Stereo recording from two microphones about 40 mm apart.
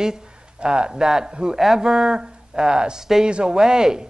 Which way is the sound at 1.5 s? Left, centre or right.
Centre.